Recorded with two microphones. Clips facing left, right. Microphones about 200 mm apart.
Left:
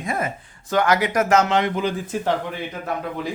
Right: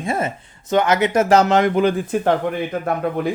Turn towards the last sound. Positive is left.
turn(degrees=-55)  # may be behind; listen again after turning